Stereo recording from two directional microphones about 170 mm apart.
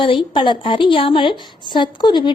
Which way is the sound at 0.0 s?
30° left (ahead or behind).